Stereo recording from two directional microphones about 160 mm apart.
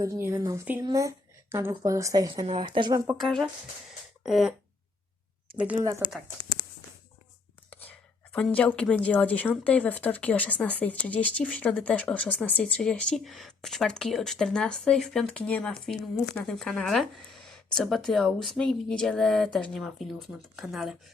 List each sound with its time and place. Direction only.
0.0 s a woman's voice: 15° right (ahead or behind)
2.3 s a woman's voice: 30° right (ahead or behind)
3.2 s a woman's voice: centre (ahead or behind); by 6.0 s 15° right (ahead or behind)
7.7 s a woman's voice: 10° left (ahead or behind)